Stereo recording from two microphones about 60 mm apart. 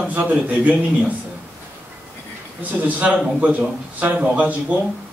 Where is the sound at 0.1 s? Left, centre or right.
Right.